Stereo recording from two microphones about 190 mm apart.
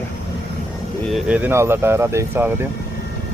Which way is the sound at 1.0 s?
5° right (ahead or behind).